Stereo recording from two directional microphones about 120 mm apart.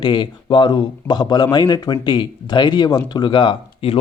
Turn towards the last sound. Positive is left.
turn(degrees=45)  # may be behind; listen again after turning